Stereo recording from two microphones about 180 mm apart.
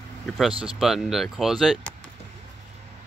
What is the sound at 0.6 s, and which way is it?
Speech, 5° right (ahead or behind).